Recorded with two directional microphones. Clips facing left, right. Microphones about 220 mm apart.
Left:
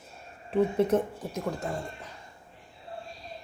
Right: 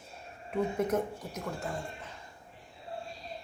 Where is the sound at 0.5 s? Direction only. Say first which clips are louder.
Left 6 dB; 30° left (ahead or behind).